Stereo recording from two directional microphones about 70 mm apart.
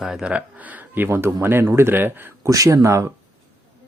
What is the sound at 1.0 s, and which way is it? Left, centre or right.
Speech, right.